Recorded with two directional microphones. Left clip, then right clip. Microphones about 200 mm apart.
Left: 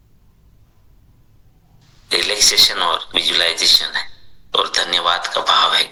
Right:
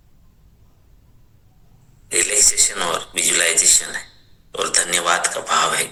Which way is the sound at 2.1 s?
10° left (ahead or behind).